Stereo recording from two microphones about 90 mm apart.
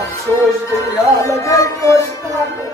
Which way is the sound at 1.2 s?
35° left (ahead or behind).